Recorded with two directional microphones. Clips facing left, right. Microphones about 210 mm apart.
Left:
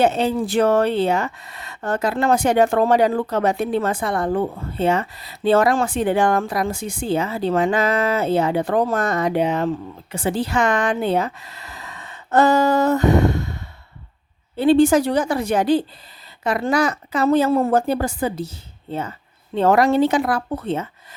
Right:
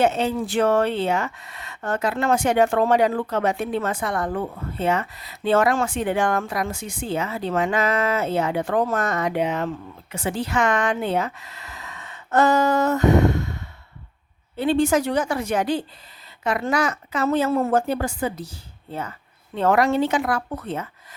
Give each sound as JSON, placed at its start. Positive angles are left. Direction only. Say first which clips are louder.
{"t": 0.0, "sound": "speech", "louder": "left 3 dB", "side_deg": 35}